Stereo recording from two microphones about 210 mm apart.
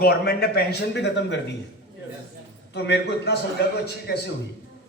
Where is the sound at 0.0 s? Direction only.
50° left (ahead or behind).